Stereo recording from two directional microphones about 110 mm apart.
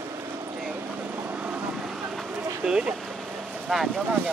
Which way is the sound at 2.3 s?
10° right (ahead or behind).